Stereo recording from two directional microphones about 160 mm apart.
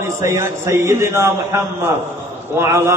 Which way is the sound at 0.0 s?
15° right (ahead or behind).